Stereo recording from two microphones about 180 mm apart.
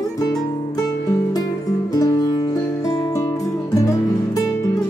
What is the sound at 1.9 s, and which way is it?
Music, 20° left (ahead or behind).